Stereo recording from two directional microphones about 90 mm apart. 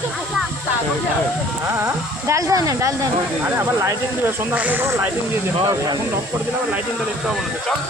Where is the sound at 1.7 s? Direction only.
30° right (ahead or behind).